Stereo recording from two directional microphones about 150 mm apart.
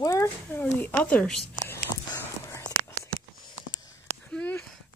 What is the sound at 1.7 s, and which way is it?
Whispering, 15° left (ahead or behind).